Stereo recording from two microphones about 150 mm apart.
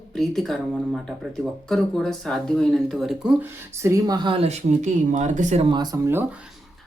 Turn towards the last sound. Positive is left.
turn(degrees=-15)  # may be behind; listen again after turning